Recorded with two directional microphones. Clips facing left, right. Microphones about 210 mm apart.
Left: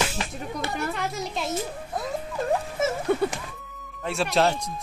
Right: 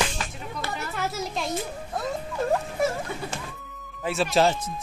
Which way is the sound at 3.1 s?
60° left (ahead or behind).